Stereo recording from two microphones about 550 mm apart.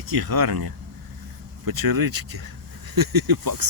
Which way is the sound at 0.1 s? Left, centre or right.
Right.